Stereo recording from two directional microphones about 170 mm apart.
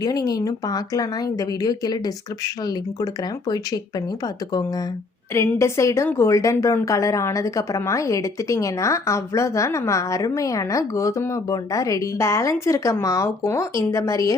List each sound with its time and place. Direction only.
0.0 s speech: 20° left (ahead or behind)
5.3 s a woman's voice: 15° left (ahead or behind)